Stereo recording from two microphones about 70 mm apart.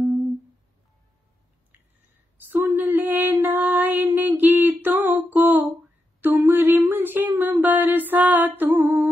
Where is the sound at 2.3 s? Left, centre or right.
Right.